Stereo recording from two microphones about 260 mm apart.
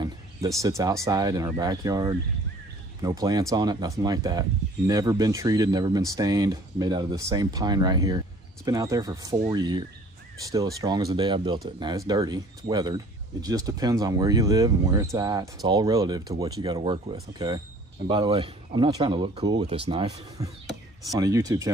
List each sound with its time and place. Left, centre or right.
0.6 s speech: centre